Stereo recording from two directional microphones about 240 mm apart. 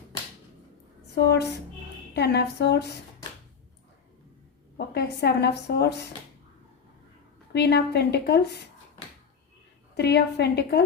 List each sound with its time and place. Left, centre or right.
1.2 s a woman's voice: left
4.9 s a woman's voice: left
7.5 s a woman's voice: left
9.9 s a woman's voice: left